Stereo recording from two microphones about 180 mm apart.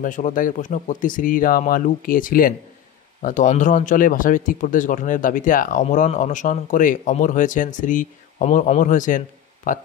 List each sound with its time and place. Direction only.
0.0 s speech: 45° left (ahead or behind)